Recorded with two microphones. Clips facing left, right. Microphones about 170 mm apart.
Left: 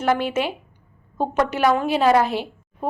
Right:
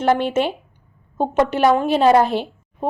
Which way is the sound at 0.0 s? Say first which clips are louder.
Right 3 dB; 30° right (ahead or behind).